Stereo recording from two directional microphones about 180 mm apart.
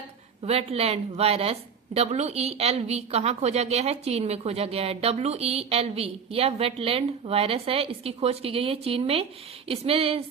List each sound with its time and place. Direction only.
0.4 s a woman's voice: 35° right (ahead or behind)